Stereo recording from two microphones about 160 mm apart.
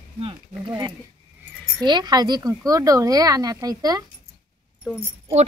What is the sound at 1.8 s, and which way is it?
Speech, 25° right (ahead or behind).